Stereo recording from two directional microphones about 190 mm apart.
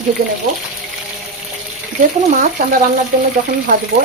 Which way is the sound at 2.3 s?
40° right (ahead or behind).